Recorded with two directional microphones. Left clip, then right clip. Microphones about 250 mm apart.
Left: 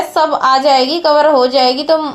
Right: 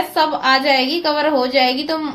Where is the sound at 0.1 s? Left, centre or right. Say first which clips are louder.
Left 5 dB; centre.